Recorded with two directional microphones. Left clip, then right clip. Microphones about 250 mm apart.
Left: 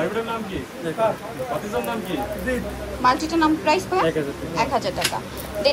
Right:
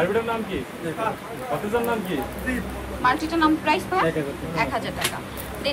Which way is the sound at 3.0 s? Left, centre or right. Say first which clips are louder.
Left 2 dB; centre.